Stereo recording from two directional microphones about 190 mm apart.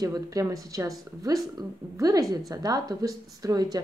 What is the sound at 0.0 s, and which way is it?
A woman's voice, 20° right (ahead or behind).